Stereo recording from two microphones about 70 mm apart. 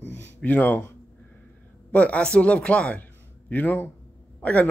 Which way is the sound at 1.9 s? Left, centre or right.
Centre.